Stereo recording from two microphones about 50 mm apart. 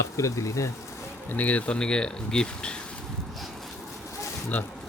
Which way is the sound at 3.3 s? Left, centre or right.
Centre.